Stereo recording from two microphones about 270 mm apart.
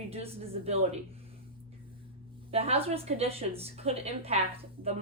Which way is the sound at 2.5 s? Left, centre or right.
Right.